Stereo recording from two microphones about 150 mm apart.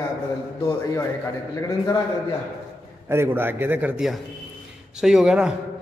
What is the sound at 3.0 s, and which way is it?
A man's voice, 15° right (ahead or behind).